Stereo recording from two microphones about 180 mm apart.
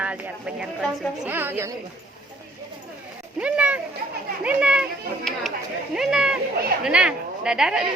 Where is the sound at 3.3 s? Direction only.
5° right (ahead or behind).